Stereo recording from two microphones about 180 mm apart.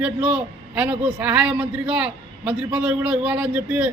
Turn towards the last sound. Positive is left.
turn(degrees=-5)  # may be behind; listen again after turning